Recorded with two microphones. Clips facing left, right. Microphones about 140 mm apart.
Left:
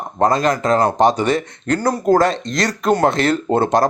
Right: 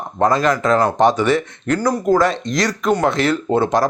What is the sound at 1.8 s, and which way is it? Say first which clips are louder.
Speech: left 1 dB; 30° left (ahead or behind).